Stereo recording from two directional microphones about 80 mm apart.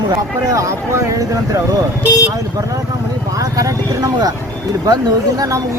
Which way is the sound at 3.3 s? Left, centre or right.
Right.